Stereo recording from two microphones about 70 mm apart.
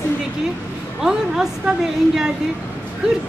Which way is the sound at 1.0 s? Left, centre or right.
Centre.